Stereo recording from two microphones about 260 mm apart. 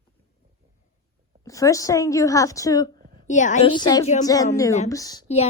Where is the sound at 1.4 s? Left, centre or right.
Centre.